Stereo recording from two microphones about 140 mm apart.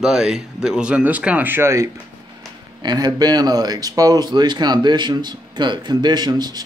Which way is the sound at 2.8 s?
30° right (ahead or behind).